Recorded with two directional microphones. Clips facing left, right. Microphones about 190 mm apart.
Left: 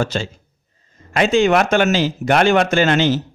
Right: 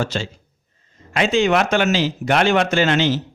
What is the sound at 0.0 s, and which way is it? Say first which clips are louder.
Speech: left 2 dB; 45° left (ahead or behind).